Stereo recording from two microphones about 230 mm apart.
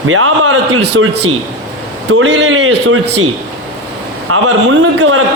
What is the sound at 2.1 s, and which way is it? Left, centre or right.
Speech, right.